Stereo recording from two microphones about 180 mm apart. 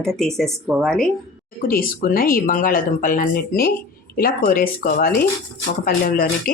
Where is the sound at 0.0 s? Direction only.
Centre (ahead or behind).